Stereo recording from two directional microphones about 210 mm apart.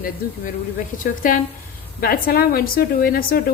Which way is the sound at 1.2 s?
40° left (ahead or behind).